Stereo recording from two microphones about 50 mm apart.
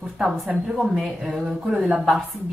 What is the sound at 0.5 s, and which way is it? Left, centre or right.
Speech, centre.